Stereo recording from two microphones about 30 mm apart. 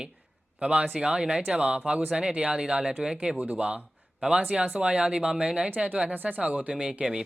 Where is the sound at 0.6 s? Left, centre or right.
Right.